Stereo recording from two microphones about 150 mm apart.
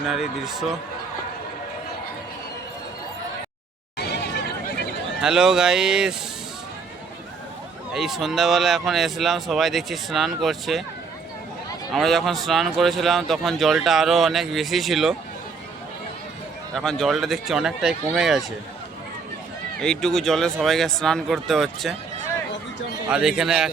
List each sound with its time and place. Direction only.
0.1 s speech: centre (ahead or behind)
3.9 s a sound: 90° left
5.2 s speech: 5° right (ahead or behind)
7.9 s speech: centre (ahead or behind)
11.9 s speech: centre (ahead or behind)
16.7 s speech: 5° left (ahead or behind)
19.8 s speech: 5° left (ahead or behind)
23.0 s speech: 5° right (ahead or behind)